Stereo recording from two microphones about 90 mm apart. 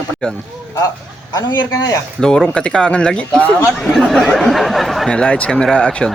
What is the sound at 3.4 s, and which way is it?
Speech, 20° left (ahead or behind).